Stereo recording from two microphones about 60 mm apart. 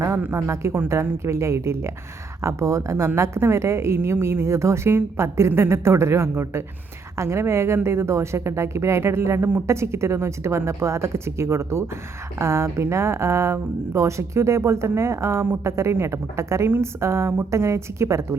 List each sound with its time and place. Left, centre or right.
0.2 s speech: right